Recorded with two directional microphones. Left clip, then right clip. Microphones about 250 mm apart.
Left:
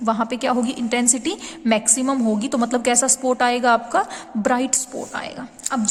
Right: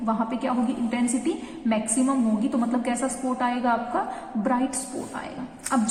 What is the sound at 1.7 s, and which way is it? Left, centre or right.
A woman's voice, left.